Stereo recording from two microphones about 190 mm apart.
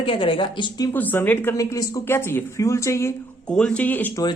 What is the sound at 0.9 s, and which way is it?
Speech, 10° left (ahead or behind).